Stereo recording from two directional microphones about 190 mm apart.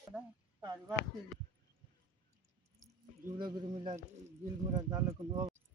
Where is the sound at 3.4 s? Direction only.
25° right (ahead or behind).